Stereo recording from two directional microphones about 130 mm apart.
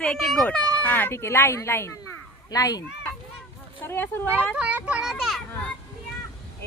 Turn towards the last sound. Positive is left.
turn(degrees=-5)  # may be behind; listen again after turning